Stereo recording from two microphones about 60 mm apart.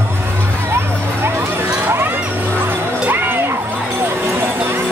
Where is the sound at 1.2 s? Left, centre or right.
Right.